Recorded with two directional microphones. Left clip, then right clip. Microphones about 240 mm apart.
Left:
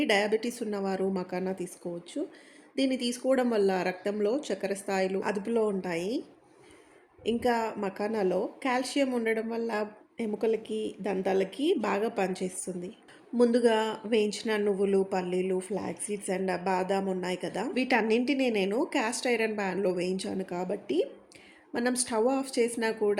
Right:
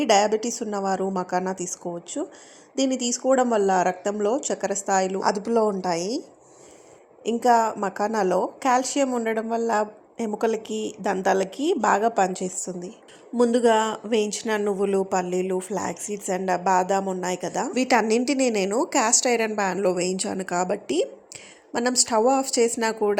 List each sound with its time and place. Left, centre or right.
0.0 s speech: centre
7.3 s speech: centre